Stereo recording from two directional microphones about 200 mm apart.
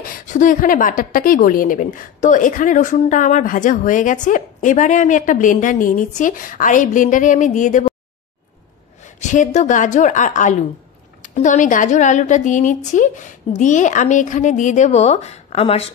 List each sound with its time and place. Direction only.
0.0 s a woman's voice: 40° left (ahead or behind)
9.3 s a woman's voice: 35° left (ahead or behind)